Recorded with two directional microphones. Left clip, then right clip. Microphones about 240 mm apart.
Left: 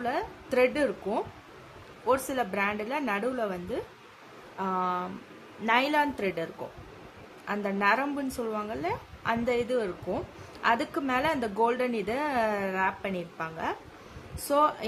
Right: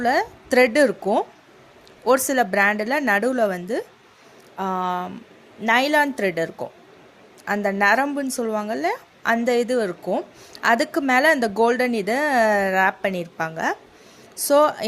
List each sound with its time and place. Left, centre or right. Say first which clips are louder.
0.0 s a woman's voice: right 11 dB; right